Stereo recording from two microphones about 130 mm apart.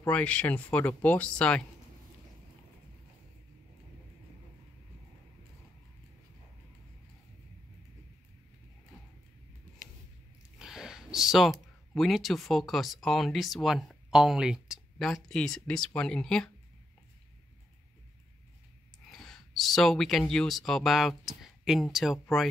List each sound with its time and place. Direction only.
0.0 s speech: 10° left (ahead or behind)
10.6 s speech: 5° right (ahead or behind)
19.0 s speech: 5° left (ahead or behind)